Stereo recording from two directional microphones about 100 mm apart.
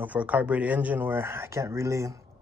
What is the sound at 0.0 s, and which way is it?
Speech, 15° right (ahead or behind).